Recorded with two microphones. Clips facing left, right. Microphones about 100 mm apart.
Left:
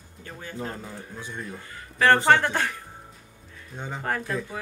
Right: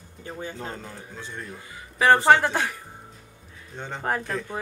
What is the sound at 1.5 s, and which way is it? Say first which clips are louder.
A woman's voice: right 1 dB; 10° right (ahead or behind).